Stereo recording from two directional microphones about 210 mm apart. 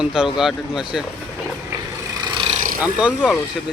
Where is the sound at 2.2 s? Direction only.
25° right (ahead or behind).